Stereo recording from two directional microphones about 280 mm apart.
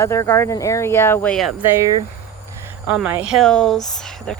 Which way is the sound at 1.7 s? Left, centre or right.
Centre.